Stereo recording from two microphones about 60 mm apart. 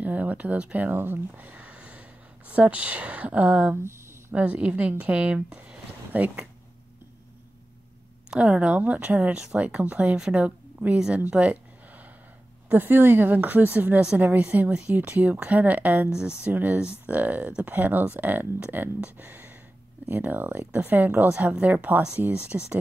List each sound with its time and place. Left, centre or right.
0.0 s speech: right
0.9 s speech: right
8.3 s a woman's voice: centre
12.7 s a woman's voice: right
16.1 s speech: centre
16.5 s a woman's voice: right